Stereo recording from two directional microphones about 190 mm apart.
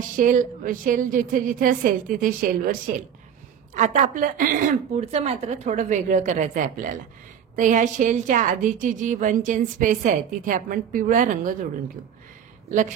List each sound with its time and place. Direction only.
0.2 s a woman's voice: 45° right (ahead or behind)